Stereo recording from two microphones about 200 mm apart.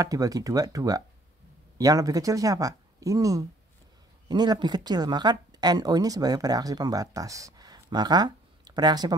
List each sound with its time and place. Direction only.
0.0 s speech: 15° right (ahead or behind)